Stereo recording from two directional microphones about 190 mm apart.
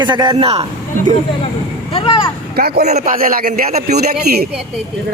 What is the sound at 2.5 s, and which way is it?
Speech, 55° right (ahead or behind).